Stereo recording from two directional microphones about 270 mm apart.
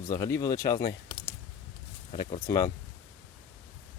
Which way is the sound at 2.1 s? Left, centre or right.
Centre.